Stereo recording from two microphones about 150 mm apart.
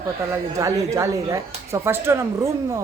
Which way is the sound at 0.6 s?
20° right (ahead or behind).